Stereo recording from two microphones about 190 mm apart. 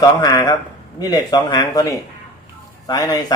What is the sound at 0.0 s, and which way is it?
Speech, 20° left (ahead or behind).